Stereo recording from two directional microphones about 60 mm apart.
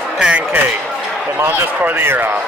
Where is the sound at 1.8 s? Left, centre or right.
Right.